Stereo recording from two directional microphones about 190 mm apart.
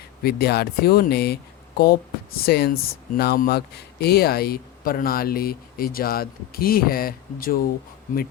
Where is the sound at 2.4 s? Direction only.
55° left (ahead or behind).